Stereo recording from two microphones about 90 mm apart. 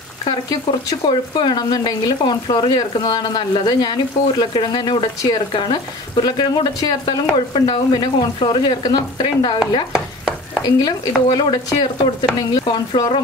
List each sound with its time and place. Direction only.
1.0 s speech: 60° left (ahead or behind)
9.9 s stir: 10° right (ahead or behind)
10.6 s speech: 55° left (ahead or behind)
12.4 s stir: 55° left (ahead or behind)